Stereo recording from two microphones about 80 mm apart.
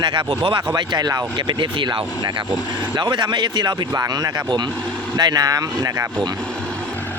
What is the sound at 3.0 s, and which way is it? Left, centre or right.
Speech, right.